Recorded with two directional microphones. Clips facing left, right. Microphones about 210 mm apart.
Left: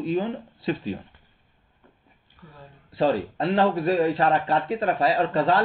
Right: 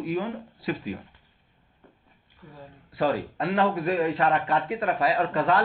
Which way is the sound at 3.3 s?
30° left (ahead or behind).